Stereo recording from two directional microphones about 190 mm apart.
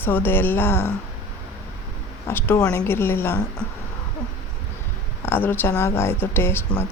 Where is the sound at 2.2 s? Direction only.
10° left (ahead or behind).